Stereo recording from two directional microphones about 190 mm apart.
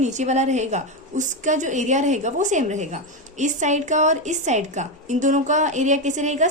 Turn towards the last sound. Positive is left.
turn(degrees=-40)  # may be behind; listen again after turning